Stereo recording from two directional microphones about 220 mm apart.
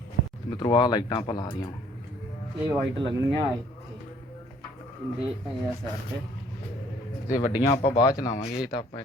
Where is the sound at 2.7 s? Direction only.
15° right (ahead or behind).